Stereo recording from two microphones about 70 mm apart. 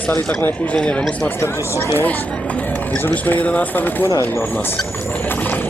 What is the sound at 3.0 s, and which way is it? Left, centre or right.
Speech, left.